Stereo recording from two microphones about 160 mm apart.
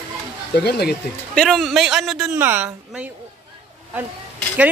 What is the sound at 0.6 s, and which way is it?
Speech, 85° left.